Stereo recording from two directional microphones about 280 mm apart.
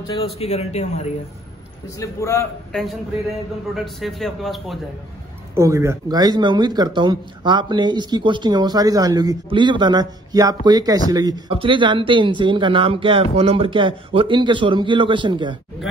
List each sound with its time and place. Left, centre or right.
0.1 s speech: left
2.0 s a man's voice: centre
3.7 s a man's voice: centre
5.5 s speech: centre